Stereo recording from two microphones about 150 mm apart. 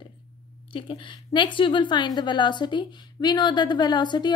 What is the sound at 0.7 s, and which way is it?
A woman's voice, 35° left (ahead or behind).